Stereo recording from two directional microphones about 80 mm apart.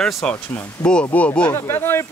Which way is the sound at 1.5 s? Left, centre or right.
Left.